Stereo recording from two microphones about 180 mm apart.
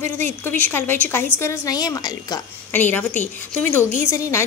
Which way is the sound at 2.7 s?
10° left (ahead or behind).